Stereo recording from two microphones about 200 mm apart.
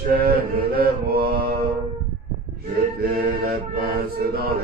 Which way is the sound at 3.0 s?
50° right (ahead or behind).